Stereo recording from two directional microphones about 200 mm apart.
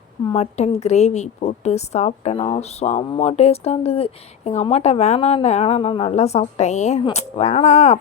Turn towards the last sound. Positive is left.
turn(degrees=35)  # may be behind; listen again after turning